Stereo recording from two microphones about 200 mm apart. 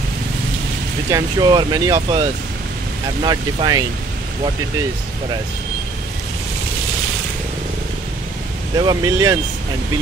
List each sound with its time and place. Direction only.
1.1 s speech: 20° right (ahead or behind)
3.3 s speech: 20° right (ahead or behind)
8.7 s speech: 20° right (ahead or behind)